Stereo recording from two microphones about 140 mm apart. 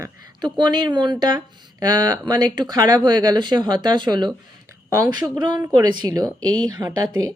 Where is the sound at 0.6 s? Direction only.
30° right (ahead or behind).